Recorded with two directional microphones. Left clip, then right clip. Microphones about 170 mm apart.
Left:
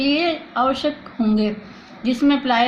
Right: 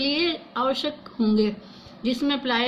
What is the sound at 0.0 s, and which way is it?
A woman's voice, 60° right (ahead or behind).